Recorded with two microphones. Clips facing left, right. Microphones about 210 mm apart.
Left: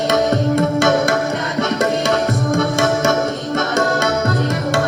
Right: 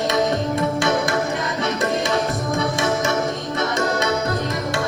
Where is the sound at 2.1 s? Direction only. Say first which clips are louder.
Left 5 dB; 50° left (ahead or behind).